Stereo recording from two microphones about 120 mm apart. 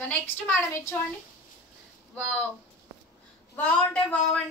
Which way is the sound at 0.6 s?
20° left (ahead or behind).